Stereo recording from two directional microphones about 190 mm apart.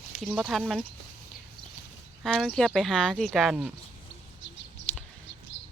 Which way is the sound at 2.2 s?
Centre (ahead or behind).